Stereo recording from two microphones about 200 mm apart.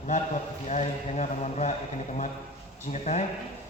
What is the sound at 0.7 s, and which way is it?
A man's voice, 35° left (ahead or behind).